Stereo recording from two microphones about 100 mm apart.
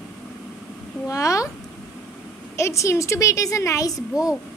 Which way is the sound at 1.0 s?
35° left (ahead or behind).